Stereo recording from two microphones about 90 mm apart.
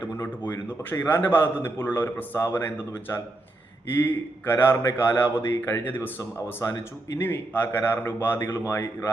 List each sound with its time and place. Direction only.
0.1 s a man's voice: 25° left (ahead or behind)